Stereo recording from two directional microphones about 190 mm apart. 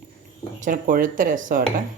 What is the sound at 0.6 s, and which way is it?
Speech, 45° right (ahead or behind).